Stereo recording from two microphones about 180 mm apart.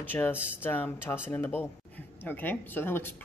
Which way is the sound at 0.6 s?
10° left (ahead or behind).